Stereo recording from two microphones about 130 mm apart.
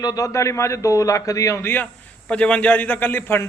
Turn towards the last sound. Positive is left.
turn(degrees=15)  # may be behind; listen again after turning